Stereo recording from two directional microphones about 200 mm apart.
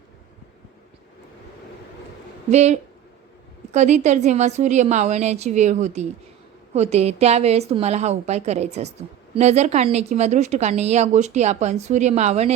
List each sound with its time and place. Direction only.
2.5 s a woman's voice: 35° right (ahead or behind)